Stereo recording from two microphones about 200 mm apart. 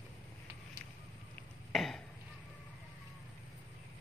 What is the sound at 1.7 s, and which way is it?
Chop, centre (ahead or behind).